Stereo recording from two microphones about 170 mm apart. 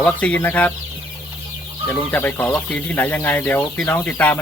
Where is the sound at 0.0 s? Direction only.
10° left (ahead or behind).